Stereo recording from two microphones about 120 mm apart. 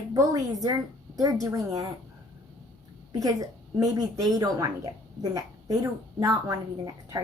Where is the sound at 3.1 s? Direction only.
30° right (ahead or behind).